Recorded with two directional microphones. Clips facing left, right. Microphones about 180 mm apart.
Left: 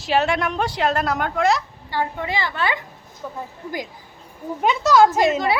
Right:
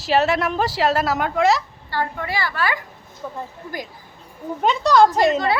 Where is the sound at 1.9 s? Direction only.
15° left (ahead or behind).